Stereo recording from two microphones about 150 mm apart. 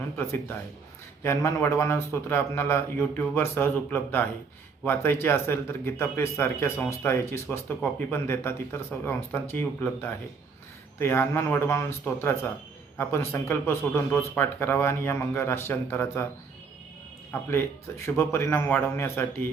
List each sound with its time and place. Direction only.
0.2 s a man's voice: 15° left (ahead or behind)
17.5 s a man's voice: 20° left (ahead or behind)